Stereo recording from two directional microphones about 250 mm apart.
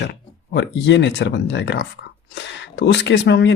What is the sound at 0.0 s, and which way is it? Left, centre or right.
Speech, left.